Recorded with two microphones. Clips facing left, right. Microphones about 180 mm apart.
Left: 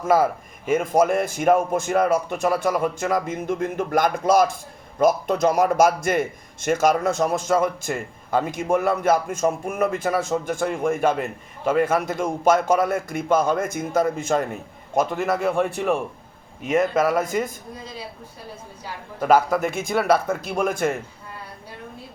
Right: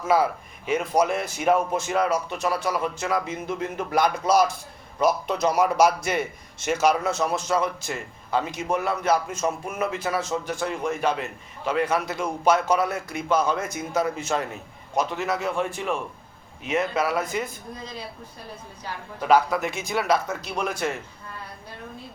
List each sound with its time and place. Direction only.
0.0 s a man's voice: 50° left (ahead or behind)
16.6 s a man's voice: 45° left (ahead or behind)
19.2 s a man's voice: 50° left (ahead or behind)